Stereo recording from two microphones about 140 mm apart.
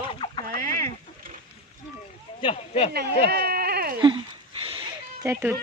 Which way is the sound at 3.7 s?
90° right.